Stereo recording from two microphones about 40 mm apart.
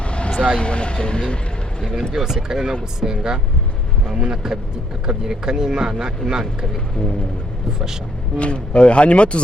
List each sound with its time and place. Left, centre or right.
0.0 s vehicle: left
0.3 s speech: left
2.1 s speech: centre
8.4 s speech: left